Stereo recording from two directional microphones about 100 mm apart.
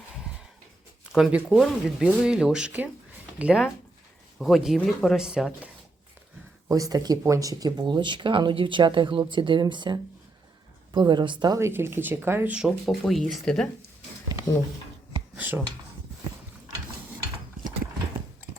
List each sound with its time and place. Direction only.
1.1 s speech: 5° right (ahead or behind)
4.4 s speech: centre (ahead or behind)
6.7 s speech: 35° right (ahead or behind)
11.5 s speech: 25° right (ahead or behind)
12.5 s speech: centre (ahead or behind)
15.4 s speech: 15° right (ahead or behind)